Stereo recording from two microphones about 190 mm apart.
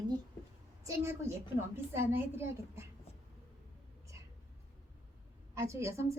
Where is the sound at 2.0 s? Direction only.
15° right (ahead or behind).